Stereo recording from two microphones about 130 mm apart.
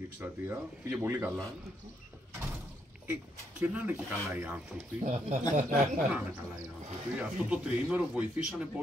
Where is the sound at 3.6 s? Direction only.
10° right (ahead or behind).